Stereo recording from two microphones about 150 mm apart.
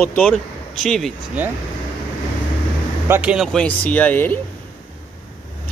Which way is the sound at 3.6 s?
10° left (ahead or behind).